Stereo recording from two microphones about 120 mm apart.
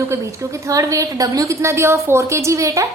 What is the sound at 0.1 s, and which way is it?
A woman's voice, 25° right (ahead or behind).